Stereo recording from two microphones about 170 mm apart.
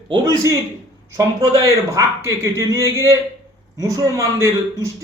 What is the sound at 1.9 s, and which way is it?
A man's voice, 15° right (ahead or behind).